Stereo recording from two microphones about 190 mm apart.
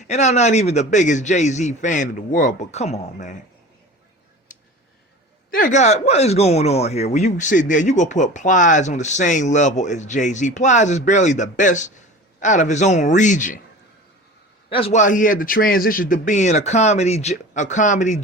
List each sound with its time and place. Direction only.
0.1 s speech: 35° left (ahead or behind)
4.5 s a sound: 45° left (ahead or behind)
5.5 s speech: 45° left (ahead or behind)
14.7 s speech: 30° left (ahead or behind)